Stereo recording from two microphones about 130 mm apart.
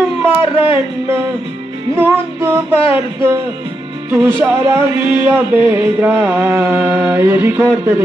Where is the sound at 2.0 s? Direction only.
15° right (ahead or behind).